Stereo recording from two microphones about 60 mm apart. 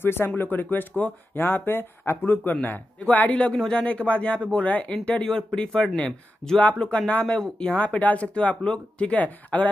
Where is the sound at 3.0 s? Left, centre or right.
Left.